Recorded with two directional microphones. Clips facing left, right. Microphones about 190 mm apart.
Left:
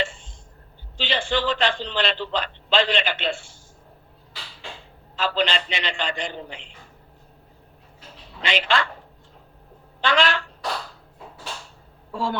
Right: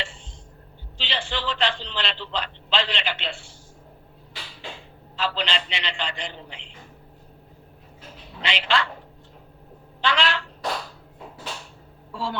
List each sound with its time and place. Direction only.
0.0 s a sound: 50° left (ahead or behind)
5.1 s a man's voice: 45° left (ahead or behind)
8.4 s a man's voice: 45° left (ahead or behind)
10.0 s speech: 50° left (ahead or behind)
12.1 s speech: 50° left (ahead or behind)